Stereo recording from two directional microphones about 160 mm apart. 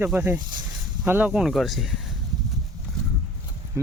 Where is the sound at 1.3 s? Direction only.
Centre (ahead or behind).